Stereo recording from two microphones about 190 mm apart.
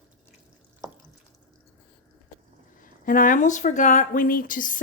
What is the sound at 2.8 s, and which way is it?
Speech, 45° left (ahead or behind).